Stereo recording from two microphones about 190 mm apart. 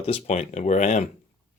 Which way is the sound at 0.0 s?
35° left (ahead or behind).